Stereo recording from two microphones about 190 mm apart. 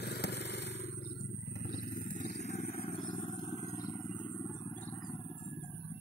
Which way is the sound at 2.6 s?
50° left (ahead or behind).